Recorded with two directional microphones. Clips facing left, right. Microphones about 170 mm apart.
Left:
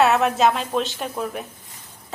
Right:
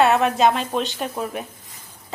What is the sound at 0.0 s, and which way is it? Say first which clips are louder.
A woman's voice: right 1 dB; centre (ahead or behind).